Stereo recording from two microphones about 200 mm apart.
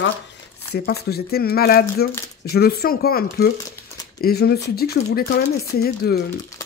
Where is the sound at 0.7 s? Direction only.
50° left (ahead or behind).